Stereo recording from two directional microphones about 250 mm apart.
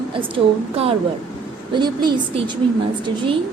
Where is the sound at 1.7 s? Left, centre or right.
Centre.